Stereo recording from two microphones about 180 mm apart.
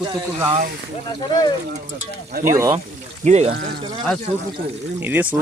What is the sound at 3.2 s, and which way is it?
Speech, 40° right (ahead or behind).